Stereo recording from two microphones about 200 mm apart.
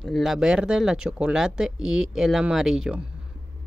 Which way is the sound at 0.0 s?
Centre (ahead or behind).